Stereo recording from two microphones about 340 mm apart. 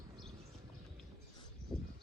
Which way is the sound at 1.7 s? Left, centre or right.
Centre.